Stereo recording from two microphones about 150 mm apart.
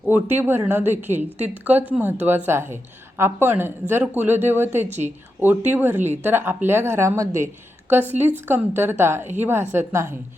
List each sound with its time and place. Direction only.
0.1 s a woman's voice: 15° right (ahead or behind)